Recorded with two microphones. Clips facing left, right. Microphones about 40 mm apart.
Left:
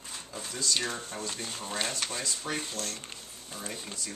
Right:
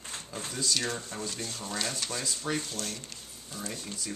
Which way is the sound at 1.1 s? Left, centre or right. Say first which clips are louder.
Even; left.